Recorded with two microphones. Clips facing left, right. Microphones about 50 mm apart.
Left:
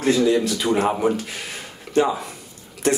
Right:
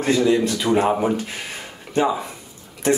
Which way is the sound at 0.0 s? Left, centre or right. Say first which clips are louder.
Even; centre.